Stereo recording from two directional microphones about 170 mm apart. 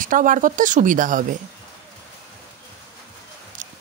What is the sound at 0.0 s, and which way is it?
Speech, 50° right (ahead or behind).